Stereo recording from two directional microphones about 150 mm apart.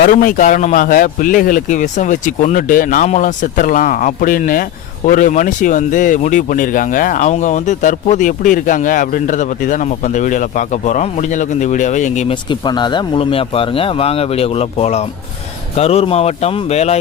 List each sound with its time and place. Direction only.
0.0 s speech: 70° left (ahead or behind); by 12.3 s 50° left (ahead or behind)
12.3 s speech: 30° left (ahead or behind)